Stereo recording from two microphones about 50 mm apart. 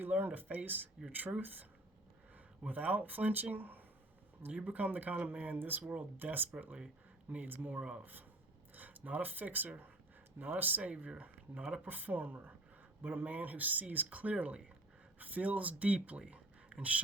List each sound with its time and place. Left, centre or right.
0.0 s speech: right
2.6 s speech: right
7.8 s speech: centre
8.7 s speech: right
10.9 s speech: right